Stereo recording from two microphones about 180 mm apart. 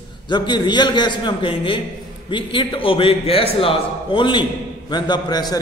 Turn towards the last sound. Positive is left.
turn(degrees=20)  # may be behind; listen again after turning